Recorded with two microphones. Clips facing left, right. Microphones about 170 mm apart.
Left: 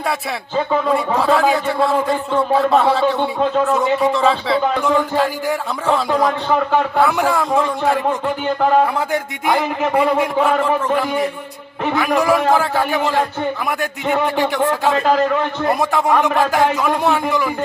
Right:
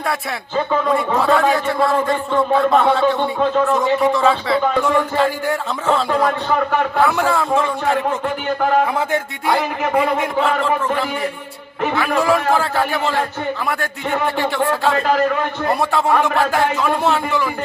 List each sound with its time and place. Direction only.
0.7 s a man's voice: 5° left (ahead or behind)
10.4 s a man's voice: 15° left (ahead or behind)